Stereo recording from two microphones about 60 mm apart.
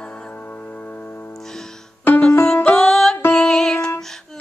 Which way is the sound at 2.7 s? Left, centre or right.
Centre.